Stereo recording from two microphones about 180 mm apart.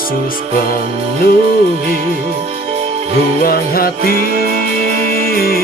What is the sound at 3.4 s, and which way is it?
Music, 55° left (ahead or behind).